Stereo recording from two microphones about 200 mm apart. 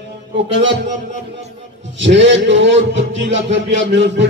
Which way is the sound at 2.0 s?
65° right (ahead or behind).